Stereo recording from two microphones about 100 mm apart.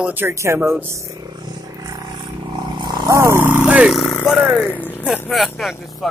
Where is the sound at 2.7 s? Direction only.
45° right (ahead or behind).